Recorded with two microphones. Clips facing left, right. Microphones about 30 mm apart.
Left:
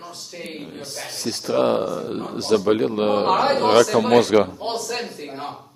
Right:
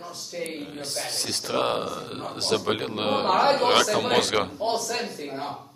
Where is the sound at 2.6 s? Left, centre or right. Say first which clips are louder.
Left 7 dB; right.